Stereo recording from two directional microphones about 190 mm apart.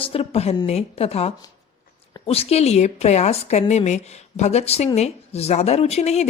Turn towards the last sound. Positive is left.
turn(degrees=35)  # may be behind; listen again after turning